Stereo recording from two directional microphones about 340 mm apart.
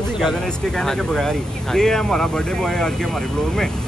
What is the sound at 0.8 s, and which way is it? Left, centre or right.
Speech, centre.